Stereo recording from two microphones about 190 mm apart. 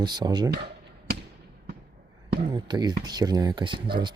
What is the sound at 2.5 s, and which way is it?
Speech, 20° right (ahead or behind).